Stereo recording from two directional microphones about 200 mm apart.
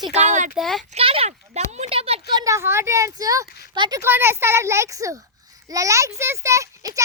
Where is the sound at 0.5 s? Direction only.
Centre (ahead or behind).